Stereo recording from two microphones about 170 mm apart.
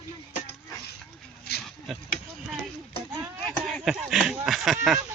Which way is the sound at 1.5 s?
70° left (ahead or behind).